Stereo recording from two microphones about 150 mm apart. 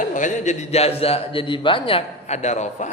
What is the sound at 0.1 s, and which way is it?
A man's voice, 55° left (ahead or behind).